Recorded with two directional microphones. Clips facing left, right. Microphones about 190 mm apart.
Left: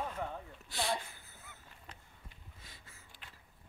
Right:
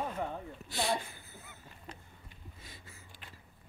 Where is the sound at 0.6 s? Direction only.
10° right (ahead or behind).